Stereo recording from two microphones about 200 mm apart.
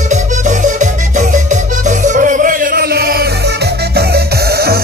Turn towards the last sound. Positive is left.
turn(degrees=-50)  # may be behind; listen again after turning